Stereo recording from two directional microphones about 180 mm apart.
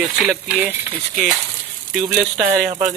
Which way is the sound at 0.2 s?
5° right (ahead or behind).